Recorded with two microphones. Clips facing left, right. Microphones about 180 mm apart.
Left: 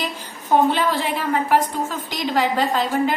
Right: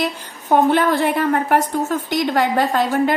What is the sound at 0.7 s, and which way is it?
A woman's voice, 50° right (ahead or behind).